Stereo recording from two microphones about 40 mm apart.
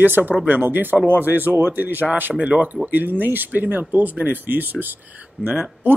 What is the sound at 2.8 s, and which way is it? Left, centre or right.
Speech, right.